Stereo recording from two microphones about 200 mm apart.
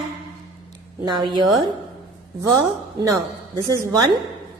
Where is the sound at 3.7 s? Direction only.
15° right (ahead or behind).